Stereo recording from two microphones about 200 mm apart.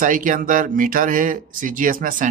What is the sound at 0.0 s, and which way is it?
Speech, 40° right (ahead or behind).